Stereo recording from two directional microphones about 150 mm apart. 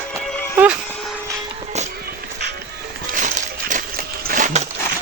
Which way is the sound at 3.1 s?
60° right (ahead or behind).